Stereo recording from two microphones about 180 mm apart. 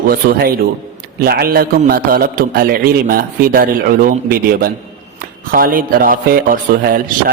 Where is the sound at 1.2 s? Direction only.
55° right (ahead or behind).